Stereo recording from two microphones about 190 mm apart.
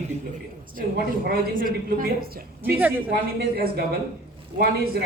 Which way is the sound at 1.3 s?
45° right (ahead or behind).